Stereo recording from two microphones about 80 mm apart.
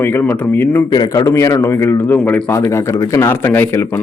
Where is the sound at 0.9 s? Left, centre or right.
Left.